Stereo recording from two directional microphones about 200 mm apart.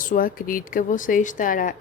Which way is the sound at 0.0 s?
45° left (ahead or behind).